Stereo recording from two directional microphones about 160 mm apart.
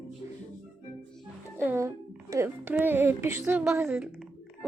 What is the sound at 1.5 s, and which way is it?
Speech, 15° right (ahead or behind).